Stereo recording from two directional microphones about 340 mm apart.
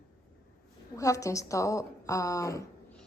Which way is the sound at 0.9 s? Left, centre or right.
Centre.